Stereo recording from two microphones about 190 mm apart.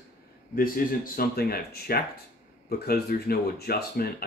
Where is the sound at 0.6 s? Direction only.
50° left (ahead or behind).